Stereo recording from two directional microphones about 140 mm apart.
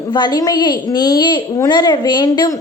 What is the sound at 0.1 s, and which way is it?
A woman's voice, 30° left (ahead or behind).